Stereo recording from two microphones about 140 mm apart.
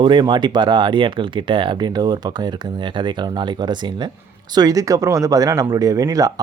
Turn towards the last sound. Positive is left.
turn(degrees=-25)  # may be behind; listen again after turning